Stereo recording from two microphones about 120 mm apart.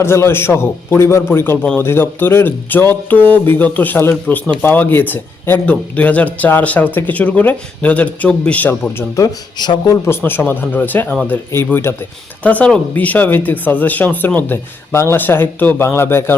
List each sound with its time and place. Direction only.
0.0 s a man's voice: 20° left (ahead or behind)
9.0 s a man's voice: 30° left (ahead or behind)
10.1 s a man's voice: 15° left (ahead or behind)